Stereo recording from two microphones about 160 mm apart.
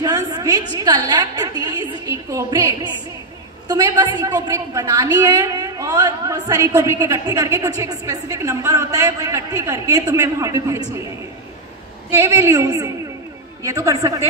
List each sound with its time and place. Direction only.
0.0 s a sound: 25° right (ahead or behind)
1.4 s music: 25° right (ahead or behind)
3.6 s a woman's voice: 25° right (ahead or behind)
12.1 s a woman's voice: 20° right (ahead or behind)